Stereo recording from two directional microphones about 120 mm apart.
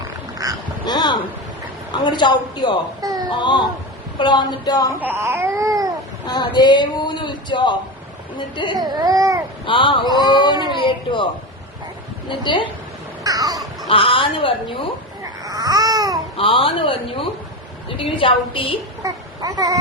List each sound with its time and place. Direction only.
0.4 s quack: 30° right (ahead or behind)
0.9 s a sound: 35° left (ahead or behind)
1.9 s speech: 40° left (ahead or behind)
3.0 s a sound: 30° right (ahead or behind)
3.2 s speech: 40° left (ahead or behind)
4.9 s baby cry: 20° right (ahead or behind)
6.2 s speech: 35° left (ahead or behind)
8.7 s baby cry: 35° right (ahead or behind)
9.6 s speech: 45° left (ahead or behind)
13.2 s caw: 30° right (ahead or behind)
13.9 s a woman's voice: 45° left (ahead or behind)
15.2 s babbling: 30° right (ahead or behind)
16.4 s a woman's voice: 50° left (ahead or behind)
19.0 s speech: 30° right (ahead or behind)